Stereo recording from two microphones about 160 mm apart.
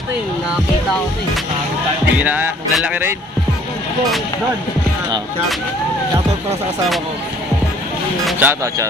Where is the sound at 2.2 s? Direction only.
10° right (ahead or behind).